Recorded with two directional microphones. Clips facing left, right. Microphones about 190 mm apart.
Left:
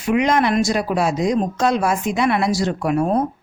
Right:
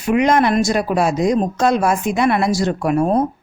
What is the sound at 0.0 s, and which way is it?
Speech, 45° right (ahead or behind).